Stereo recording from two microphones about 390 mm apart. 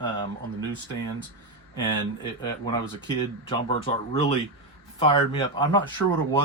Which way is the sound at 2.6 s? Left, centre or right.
Centre.